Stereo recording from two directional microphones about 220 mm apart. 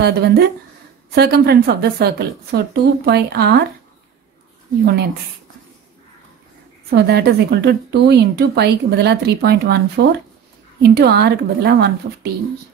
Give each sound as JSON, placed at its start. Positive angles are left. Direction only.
{"t": 0.0, "sound": "a woman's voice", "side_deg": -45}
{"t": 6.9, "sound": "a woman's voice", "side_deg": -45}